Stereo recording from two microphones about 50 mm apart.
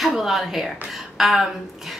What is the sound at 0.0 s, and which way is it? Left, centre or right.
A woman's voice, centre.